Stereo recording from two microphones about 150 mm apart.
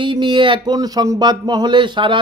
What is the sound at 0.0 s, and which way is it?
Speech, 30° right (ahead or behind).